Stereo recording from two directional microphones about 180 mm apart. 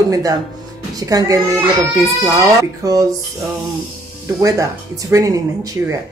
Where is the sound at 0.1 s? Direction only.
20° right (ahead or behind).